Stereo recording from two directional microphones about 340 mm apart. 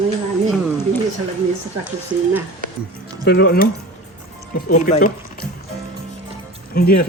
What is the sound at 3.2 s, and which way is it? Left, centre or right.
Speech, left.